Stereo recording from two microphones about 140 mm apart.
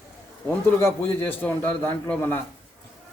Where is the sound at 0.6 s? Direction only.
15° left (ahead or behind).